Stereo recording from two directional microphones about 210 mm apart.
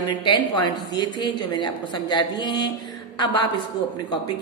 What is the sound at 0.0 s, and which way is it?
A woman's voice, 20° left (ahead or behind).